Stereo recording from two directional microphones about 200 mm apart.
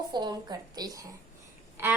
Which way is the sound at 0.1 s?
20° right (ahead or behind).